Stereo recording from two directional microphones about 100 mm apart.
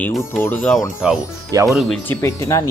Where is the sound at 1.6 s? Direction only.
Centre (ahead or behind).